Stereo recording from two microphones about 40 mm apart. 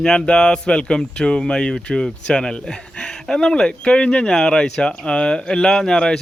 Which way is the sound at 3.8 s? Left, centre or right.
Left.